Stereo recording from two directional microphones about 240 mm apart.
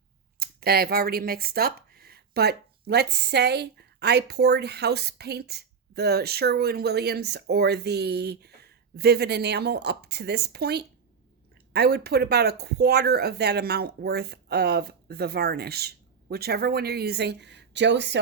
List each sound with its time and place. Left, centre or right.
0.3 s speech: right